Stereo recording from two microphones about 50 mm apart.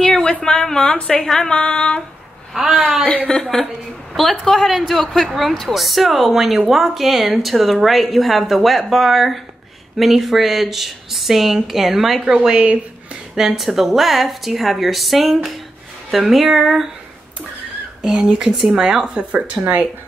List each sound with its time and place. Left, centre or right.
0.0 s a sound: centre
0.9 s female singing: left
1.2 s a sound: centre
1.6 s female singing: centre
2.5 s speech: centre
3.3 s a sound: centre
4.1 s a woman's voice: centre
12.4 s speech: right
13.4 s a woman's voice: centre
18.0 s speech: centre; by 19.8 s right